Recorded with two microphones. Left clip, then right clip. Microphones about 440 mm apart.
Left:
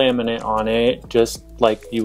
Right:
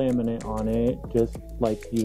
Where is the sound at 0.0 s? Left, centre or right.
Centre.